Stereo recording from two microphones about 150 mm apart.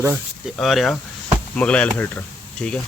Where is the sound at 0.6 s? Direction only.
Centre (ahead or behind).